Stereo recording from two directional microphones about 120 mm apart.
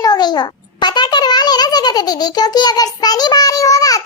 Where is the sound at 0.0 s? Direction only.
35° left (ahead or behind).